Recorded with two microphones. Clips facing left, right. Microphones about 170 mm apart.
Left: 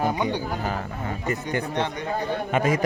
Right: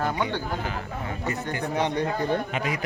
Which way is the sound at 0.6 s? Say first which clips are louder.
Left 3 dB; 40° left (ahead or behind).